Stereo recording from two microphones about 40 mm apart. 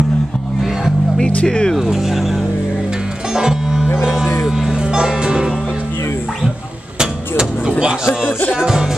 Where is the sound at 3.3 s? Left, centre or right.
Centre.